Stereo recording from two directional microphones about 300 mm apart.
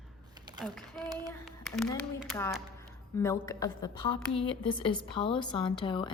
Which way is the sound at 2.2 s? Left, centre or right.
Centre.